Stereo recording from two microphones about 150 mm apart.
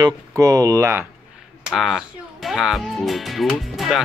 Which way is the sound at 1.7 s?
Centre (ahead or behind).